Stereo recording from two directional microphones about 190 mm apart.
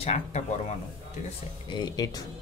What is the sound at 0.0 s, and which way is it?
Speech, 35° left (ahead or behind).